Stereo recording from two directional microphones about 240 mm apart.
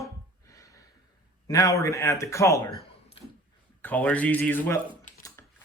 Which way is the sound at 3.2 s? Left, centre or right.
Left.